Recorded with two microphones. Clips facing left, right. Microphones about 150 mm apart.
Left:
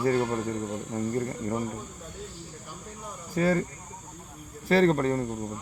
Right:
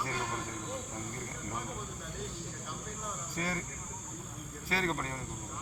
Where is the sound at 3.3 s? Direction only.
45° left (ahead or behind).